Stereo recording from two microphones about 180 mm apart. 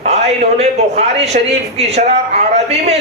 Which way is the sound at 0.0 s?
40° right (ahead or behind).